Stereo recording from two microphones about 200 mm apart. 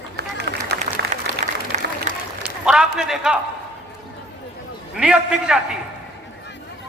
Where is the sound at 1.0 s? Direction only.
55° right (ahead or behind).